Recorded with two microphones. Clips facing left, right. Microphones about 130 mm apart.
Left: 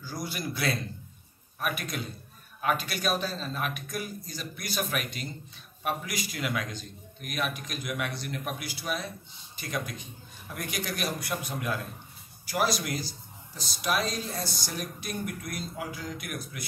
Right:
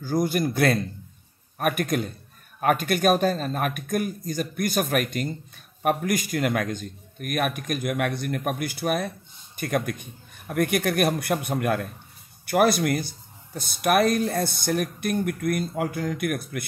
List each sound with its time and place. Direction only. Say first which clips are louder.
0.0 s a man's voice: right 12 dB; 50° right (ahead or behind)